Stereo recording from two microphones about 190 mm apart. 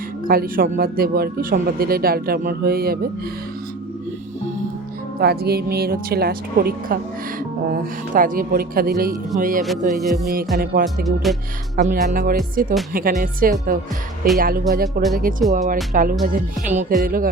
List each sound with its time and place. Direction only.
0.3 s speech: 50° right (ahead or behind)
5.2 s speech: 55° right (ahead or behind)
9.9 s music: centre (ahead or behind)
10.6 s speech: 55° right (ahead or behind)
10.8 s music: centre (ahead or behind)
11.8 s speech: 45° right (ahead or behind)